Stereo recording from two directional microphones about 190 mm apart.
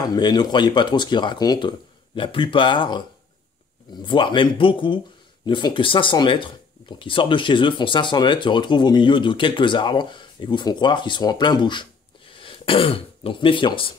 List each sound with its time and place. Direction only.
0.1 s speech: 20° left (ahead or behind)
4.0 s speech: 25° left (ahead or behind)